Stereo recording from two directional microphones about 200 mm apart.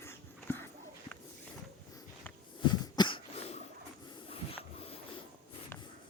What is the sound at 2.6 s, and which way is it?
Cough, 20° left (ahead or behind).